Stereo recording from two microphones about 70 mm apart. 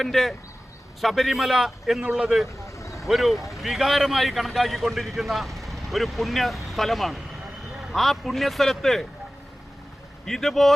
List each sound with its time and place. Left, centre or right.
0.0 s a man's voice: centre
2.6 s vehicle: left
3.1 s a man's voice: centre
10.2 s a man's voice: centre